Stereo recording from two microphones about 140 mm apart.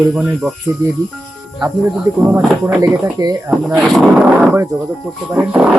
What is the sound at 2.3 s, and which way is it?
Speech, 20° right (ahead or behind).